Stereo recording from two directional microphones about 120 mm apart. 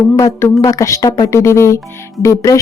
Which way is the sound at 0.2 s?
25° left (ahead or behind).